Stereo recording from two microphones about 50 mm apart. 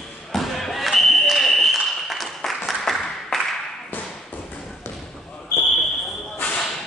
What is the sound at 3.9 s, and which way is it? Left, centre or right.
Thump, left.